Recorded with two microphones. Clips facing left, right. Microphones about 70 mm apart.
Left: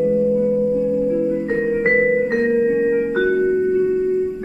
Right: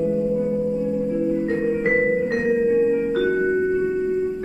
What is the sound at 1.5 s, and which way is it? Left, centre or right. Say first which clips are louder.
Music: left 3 dB; left.